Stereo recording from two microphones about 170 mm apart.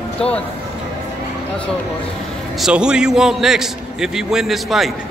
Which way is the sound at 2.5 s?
5° right (ahead or behind).